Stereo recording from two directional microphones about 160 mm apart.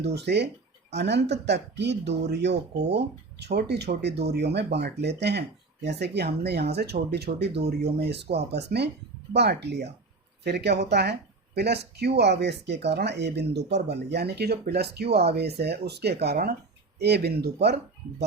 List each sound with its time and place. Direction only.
0.0 s speech: 90° right